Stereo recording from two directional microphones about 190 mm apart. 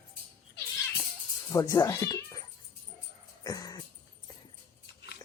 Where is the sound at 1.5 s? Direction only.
20° left (ahead or behind).